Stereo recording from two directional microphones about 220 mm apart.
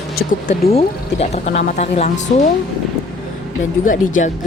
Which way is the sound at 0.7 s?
30° left (ahead or behind).